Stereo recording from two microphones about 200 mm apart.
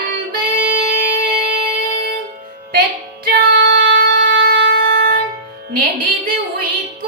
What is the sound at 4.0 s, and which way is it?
Music, 55° right (ahead or behind).